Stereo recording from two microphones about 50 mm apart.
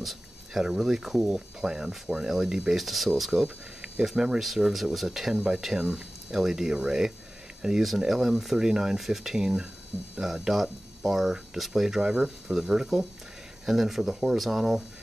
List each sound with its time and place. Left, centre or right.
0.0 s speech: centre